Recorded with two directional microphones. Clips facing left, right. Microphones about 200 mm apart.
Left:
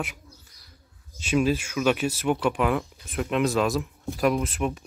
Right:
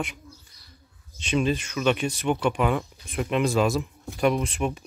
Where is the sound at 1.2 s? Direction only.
5° left (ahead or behind).